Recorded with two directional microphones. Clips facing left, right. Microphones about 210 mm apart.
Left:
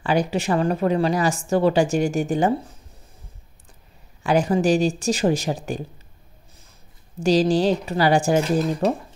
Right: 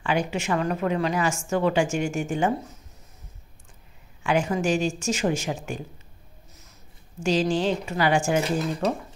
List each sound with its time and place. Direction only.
0.0 s a woman's voice: 35° left (ahead or behind)
4.2 s a woman's voice: 35° left (ahead or behind)
7.2 s a woman's voice: 35° left (ahead or behind)